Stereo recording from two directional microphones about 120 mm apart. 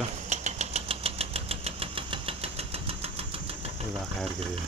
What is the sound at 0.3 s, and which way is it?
Engine, 80° right.